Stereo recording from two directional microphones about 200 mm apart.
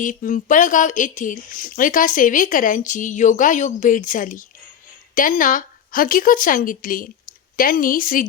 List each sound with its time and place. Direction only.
0.0 s a woman's voice: 40° left (ahead or behind)